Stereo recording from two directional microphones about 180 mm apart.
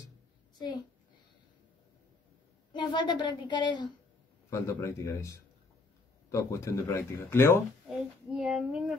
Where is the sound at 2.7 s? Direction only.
25° left (ahead or behind).